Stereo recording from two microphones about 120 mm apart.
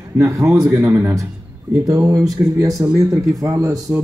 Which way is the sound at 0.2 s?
25° right (ahead or behind).